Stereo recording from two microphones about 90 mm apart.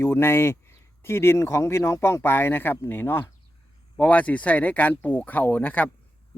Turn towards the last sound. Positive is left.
turn(degrees=20)  # may be behind; listen again after turning